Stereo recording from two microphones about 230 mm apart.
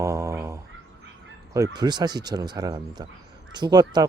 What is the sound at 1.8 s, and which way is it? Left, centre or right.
Speech, centre.